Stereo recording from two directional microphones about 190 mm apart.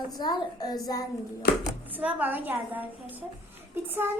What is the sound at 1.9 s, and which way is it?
A woman's voice, 10° right (ahead or behind).